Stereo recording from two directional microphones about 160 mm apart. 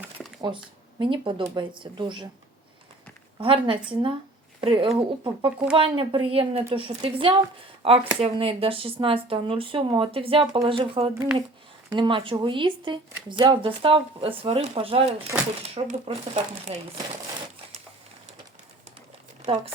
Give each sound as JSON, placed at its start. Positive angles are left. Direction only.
{"t": 0.4, "sound": "speech", "side_deg": -30}
{"t": 3.3, "sound": "speech", "side_deg": -35}
{"t": 15.3, "sound": "speech", "side_deg": -10}
{"t": 16.0, "sound": "speech", "side_deg": -40}
{"t": 19.4, "sound": "speech", "side_deg": -35}